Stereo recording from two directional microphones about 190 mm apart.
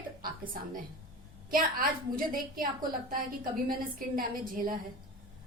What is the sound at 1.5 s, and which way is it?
A woman's voice, 45° right (ahead or behind).